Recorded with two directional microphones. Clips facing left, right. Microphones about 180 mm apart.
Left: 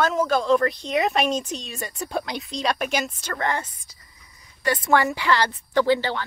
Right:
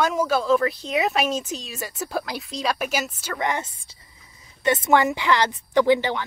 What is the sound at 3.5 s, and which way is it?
A woman's voice, 20° right (ahead or behind).